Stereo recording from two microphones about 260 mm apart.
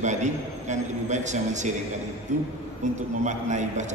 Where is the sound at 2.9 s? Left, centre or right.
Right.